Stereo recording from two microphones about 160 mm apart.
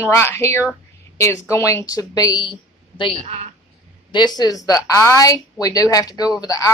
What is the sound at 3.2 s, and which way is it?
Speech, 40° right (ahead or behind).